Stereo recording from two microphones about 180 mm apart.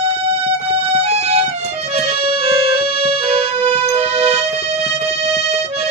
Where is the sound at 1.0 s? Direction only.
35° right (ahead or behind).